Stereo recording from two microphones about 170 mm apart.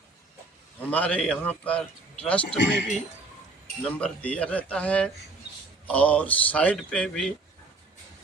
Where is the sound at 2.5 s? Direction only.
90° left.